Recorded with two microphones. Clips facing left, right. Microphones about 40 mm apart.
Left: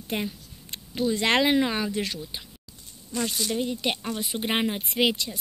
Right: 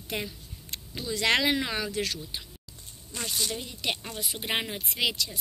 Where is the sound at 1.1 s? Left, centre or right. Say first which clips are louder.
Left 1 dB; left.